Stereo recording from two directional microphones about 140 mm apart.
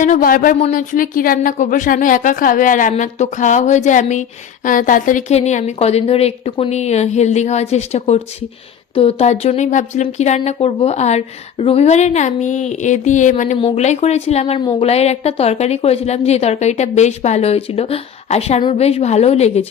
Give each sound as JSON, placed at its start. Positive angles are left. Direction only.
{"t": 0.0, "sound": "speech", "side_deg": 80}
{"t": 5.3, "sound": "a woman's voice", "side_deg": 55}
{"t": 14.6, "sound": "speech", "side_deg": 35}
{"t": 14.8, "sound": "a woman's voice", "side_deg": 50}